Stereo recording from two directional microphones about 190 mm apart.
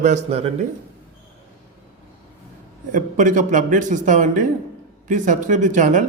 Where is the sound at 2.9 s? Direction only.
40° right (ahead or behind).